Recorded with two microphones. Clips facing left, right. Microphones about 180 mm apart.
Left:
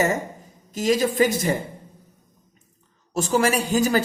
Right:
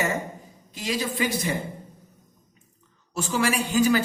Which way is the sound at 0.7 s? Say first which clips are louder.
Left 8 dB; 45° left (ahead or behind).